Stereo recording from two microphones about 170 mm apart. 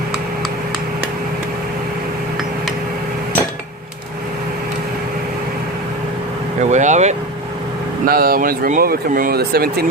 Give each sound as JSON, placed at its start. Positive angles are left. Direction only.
{"t": 6.6, "sound": "speech", "side_deg": -45}
{"t": 8.0, "sound": "speech", "side_deg": -60}